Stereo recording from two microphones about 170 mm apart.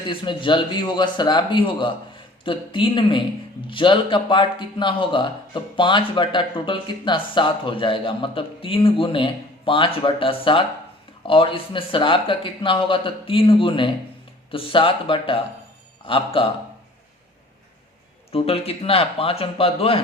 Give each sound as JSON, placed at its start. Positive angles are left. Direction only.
{"t": 0.1, "sound": "speech", "side_deg": 30}
{"t": 18.3, "sound": "speech", "side_deg": 35}